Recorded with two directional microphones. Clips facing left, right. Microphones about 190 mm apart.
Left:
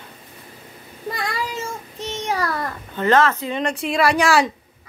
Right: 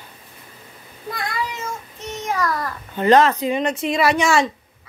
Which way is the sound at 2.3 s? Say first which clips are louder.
Right 1 dB; 30° left (ahead or behind).